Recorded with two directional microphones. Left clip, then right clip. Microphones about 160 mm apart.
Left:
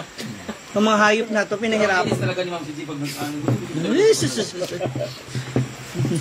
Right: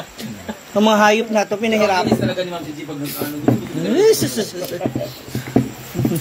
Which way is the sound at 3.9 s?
20° left (ahead or behind).